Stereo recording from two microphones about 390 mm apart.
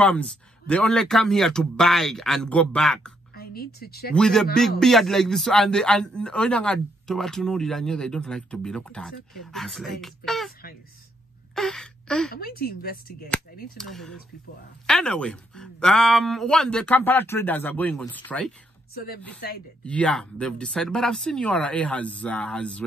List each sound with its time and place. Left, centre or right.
0.0 s a man's voice: centre
3.3 s a woman's voice: left
4.1 s a man's voice: centre
11.5 s gasp: centre
12.4 s speech: left
13.7 s a man's voice: centre
19.4 s speech: left
19.8 s a man's voice: centre